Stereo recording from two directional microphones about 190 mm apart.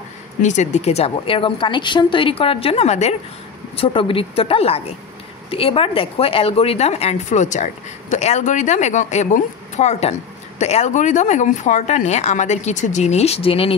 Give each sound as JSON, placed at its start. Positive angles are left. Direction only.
{"t": 0.4, "sound": "speech", "side_deg": 40}